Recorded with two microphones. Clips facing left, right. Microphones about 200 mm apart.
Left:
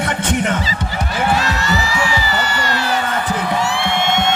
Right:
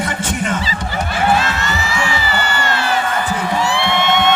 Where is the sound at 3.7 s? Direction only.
65° right (ahead or behind).